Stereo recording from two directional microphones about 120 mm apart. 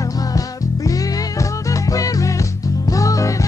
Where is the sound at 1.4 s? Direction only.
25° left (ahead or behind).